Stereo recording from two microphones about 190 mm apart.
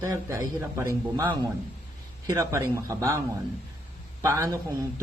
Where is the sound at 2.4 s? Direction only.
15° right (ahead or behind).